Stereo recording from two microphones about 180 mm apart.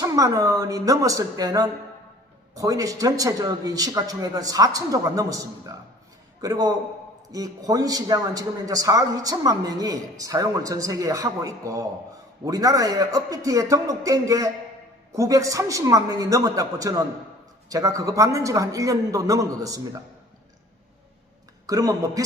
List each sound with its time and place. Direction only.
0.0 s a man's voice: 20° right (ahead or behind)
21.7 s a man's voice: 20° right (ahead or behind)